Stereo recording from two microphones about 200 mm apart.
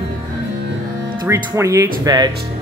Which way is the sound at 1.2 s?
15° right (ahead or behind).